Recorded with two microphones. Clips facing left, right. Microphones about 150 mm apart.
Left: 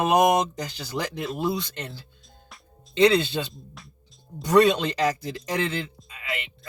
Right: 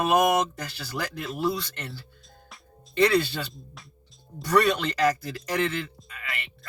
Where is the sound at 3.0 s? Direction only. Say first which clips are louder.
Left 4 dB; 20° left (ahead or behind).